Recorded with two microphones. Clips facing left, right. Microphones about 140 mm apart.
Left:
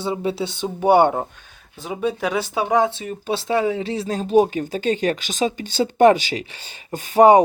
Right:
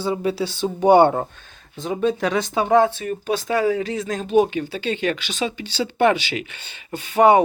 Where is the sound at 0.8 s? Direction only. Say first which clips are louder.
Right 1 dB; 10° left (ahead or behind).